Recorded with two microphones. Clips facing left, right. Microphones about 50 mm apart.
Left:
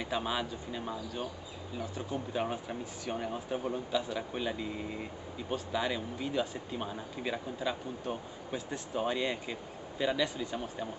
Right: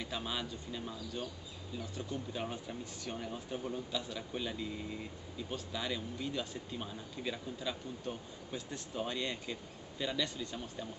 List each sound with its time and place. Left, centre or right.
0.0 s a man's voice: centre
8.5 s a man's voice: centre